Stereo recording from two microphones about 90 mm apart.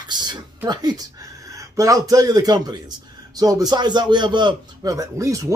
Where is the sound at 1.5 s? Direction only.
40° right (ahead or behind); by 4.6 s 60° right (ahead or behind).